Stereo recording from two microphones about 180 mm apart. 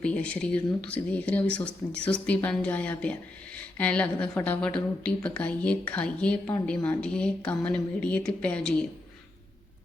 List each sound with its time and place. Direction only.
0.0 s speech: 5° left (ahead or behind)